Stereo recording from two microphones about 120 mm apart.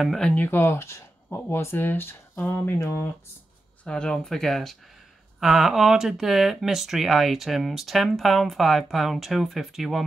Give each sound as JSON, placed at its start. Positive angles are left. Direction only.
{"t": 0.0, "sound": "speech", "side_deg": 0}
{"t": 0.3, "sound": "speech", "side_deg": 15}
{"t": 3.8, "sound": "speech", "side_deg": 5}